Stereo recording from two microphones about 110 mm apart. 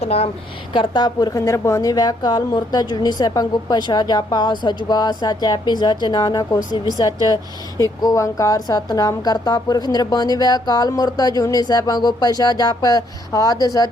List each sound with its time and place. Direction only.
0.0 s speech: 65° left (ahead or behind)
0.7 s a woman's voice: 45° left (ahead or behind)